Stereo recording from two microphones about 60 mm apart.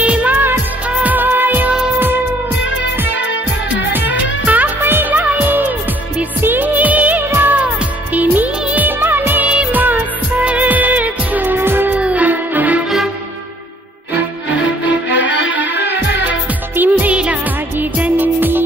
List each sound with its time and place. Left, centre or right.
0.0 s music: right
0.8 s music of bollywood: right
4.5 s music: right
7.4 s music of bollywood: right
10.4 s music: right
12.0 s music: right
16.3 s music: right